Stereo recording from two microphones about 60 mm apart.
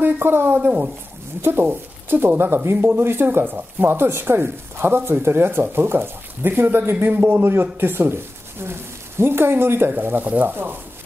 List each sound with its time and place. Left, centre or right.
0.0 s speech: right
0.7 s a woman's voice: right
1.4 s speech: right